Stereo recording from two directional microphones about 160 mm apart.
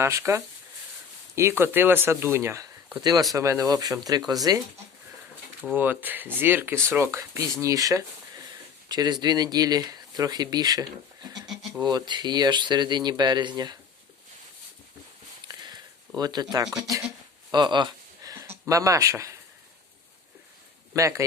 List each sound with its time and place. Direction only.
0.0 s speech: 20° right (ahead or behind)
5.6 s speech: 10° right (ahead or behind); by 13.7 s 25° right (ahead or behind)
15.6 s a sound: 25° right (ahead or behind)
16.7 s speech: 20° right (ahead or behind)
18.3 s a sound: 20° right (ahead or behind)
20.9 s speech: 20° right (ahead or behind)